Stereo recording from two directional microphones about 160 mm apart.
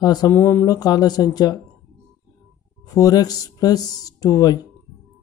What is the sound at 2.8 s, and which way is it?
Speech, 20° left (ahead or behind).